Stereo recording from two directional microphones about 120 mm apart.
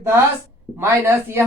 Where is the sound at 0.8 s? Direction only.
20° right (ahead or behind).